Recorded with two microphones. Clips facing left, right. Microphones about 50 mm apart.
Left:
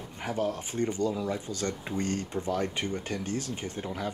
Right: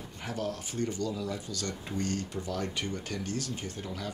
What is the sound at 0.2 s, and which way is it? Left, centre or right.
Speech, left.